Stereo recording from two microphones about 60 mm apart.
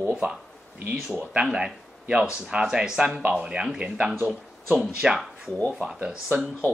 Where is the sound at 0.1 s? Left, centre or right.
Centre.